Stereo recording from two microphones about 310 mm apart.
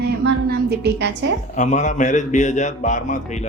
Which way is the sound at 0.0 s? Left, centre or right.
Right.